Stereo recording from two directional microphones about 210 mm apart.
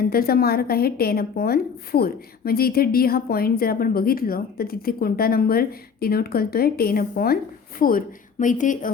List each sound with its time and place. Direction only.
0.0 s a woman's voice: 45° left (ahead or behind)